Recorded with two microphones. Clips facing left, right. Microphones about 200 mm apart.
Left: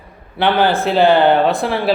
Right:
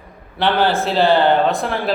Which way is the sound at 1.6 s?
Centre (ahead or behind).